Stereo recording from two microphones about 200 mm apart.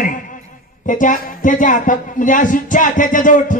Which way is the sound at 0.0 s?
40° left (ahead or behind).